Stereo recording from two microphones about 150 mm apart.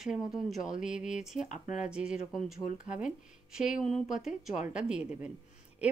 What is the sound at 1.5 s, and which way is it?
Speech, 55° left (ahead or behind).